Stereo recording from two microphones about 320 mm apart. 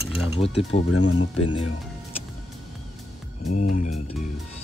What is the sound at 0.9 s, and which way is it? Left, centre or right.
Speech, left.